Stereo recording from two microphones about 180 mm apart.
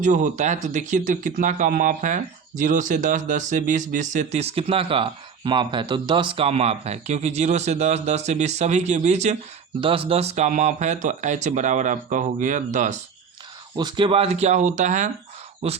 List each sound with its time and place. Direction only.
0.0 s speech: 45° right (ahead or behind)
13.7 s speech: 25° right (ahead or behind)